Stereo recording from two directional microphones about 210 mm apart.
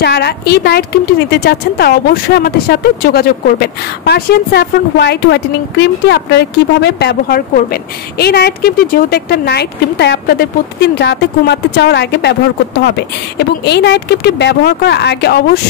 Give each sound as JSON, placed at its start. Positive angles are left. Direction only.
{"t": 0.0, "sound": "a woman's voice", "side_deg": 50}